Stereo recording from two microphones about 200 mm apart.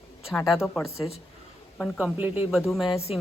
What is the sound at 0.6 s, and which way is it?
A woman's voice, centre (ahead or behind).